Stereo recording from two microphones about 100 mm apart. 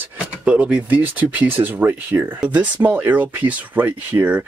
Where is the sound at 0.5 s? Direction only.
15° right (ahead or behind).